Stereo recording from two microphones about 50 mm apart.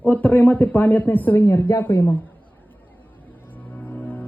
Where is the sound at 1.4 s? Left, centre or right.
Left.